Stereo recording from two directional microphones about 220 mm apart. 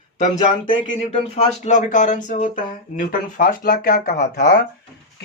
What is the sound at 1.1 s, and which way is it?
Speech, 30° left (ahead or behind).